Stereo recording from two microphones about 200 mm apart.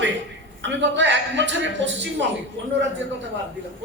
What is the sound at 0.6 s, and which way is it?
A man's voice, 60° right (ahead or behind).